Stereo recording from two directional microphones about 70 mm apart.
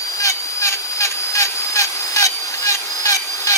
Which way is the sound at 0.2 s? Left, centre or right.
Left.